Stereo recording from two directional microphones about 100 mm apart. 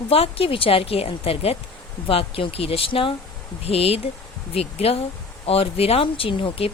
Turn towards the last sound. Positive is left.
turn(degrees=70)  # may be behind; listen again after turning